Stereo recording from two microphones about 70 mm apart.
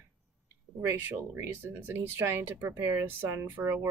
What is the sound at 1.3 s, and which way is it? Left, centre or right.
Speech, right.